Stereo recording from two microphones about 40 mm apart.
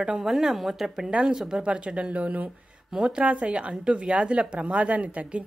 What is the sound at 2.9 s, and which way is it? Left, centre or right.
Speech, right.